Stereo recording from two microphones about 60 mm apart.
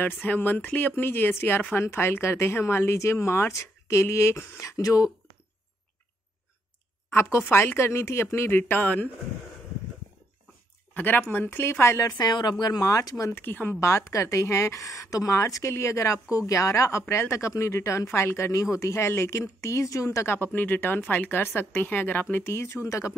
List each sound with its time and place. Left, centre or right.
0.0 s speech: left
7.1 s speech: left
7.4 s speech: left
11.0 s speech: left
12.6 s speech: left
13.3 s speech: left
13.7 s speech: left
20.5 s speech: left